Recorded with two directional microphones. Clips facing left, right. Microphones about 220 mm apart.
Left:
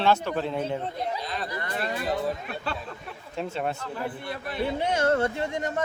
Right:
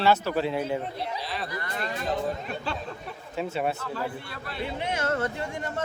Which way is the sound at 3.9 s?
20° left (ahead or behind).